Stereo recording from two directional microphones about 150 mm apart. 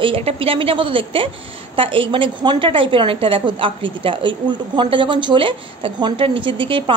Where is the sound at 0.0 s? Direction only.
40° right (ahead or behind).